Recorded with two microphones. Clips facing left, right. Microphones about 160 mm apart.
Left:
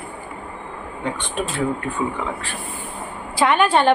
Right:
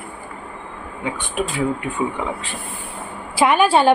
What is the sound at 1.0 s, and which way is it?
A woman's voice, 10° right (ahead or behind).